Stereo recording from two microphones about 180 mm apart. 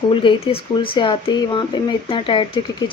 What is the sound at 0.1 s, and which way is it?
Speech, 30° left (ahead or behind).